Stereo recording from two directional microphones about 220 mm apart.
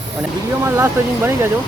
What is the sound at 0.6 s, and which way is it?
Speech, 10° right (ahead or behind).